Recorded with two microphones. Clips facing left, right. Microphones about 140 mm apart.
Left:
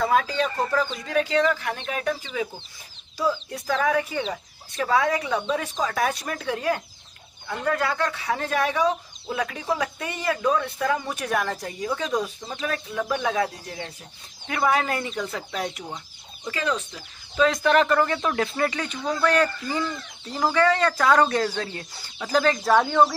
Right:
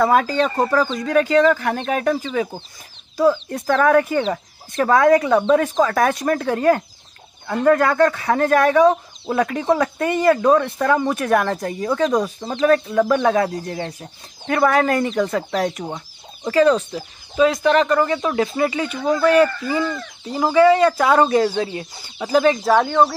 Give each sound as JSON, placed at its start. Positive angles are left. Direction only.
{"t": 0.0, "sound": "speech", "side_deg": -50}
{"t": 17.4, "sound": "speech", "side_deg": 0}